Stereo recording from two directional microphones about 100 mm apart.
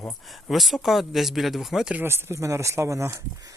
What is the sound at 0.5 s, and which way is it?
Speech, centre (ahead or behind).